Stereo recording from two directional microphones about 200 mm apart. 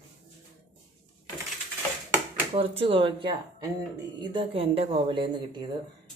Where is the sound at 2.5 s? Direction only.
25° right (ahead or behind).